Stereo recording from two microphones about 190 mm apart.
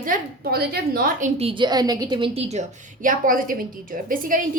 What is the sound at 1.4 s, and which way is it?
A woman's voice, 25° right (ahead or behind).